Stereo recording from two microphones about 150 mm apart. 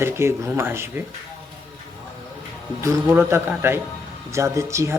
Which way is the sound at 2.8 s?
20° right (ahead or behind).